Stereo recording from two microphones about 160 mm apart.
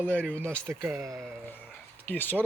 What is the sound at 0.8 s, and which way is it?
Speech, 15° right (ahead or behind).